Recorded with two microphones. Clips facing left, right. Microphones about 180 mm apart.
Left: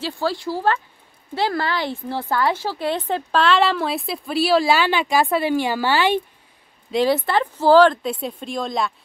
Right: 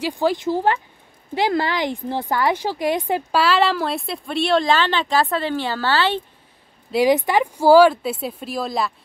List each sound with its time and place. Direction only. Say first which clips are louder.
0.0 s a woman's voice: right 4 dB; 15° right (ahead or behind); by 6.2 s 15° left (ahead or behind)
6.9 s speech: right 2 dB; 15° right (ahead or behind)